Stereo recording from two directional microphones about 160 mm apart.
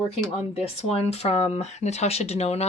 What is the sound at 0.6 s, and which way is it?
Speech, 40° left (ahead or behind).